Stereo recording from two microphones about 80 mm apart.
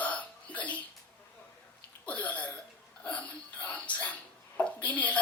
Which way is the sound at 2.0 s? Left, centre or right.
Centre.